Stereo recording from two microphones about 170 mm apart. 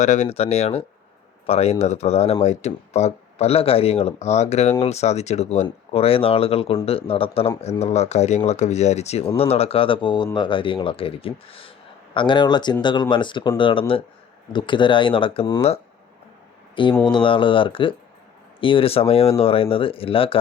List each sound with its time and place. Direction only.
0.0 s speech: 45° left (ahead or behind)
17.1 s speech: 30° left (ahead or behind)